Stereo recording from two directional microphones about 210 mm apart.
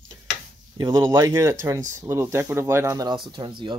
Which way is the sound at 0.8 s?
15° right (ahead or behind).